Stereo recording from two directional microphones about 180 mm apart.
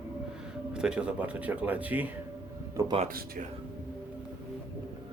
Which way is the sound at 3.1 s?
55° right (ahead or behind).